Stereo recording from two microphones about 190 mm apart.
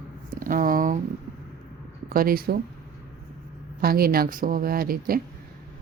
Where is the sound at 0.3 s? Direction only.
45° right (ahead or behind).